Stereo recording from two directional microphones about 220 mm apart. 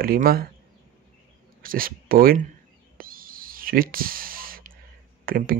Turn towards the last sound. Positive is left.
turn(degrees=-40)  # may be behind; listen again after turning